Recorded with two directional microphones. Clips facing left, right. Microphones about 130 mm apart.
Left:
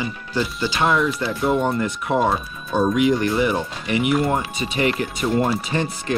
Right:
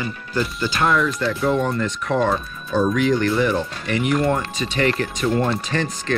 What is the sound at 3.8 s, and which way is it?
Speech, 10° left (ahead or behind).